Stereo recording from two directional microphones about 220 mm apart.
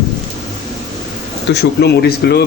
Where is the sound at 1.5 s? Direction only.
50° left (ahead or behind).